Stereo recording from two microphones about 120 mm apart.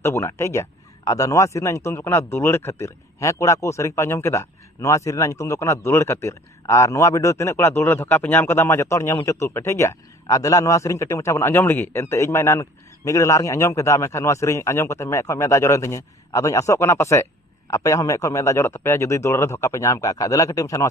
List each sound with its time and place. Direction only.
0.0 s a man's voice: 25° left (ahead or behind)